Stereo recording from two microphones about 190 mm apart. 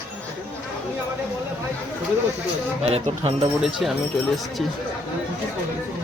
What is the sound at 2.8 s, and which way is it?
Speech, 30° right (ahead or behind).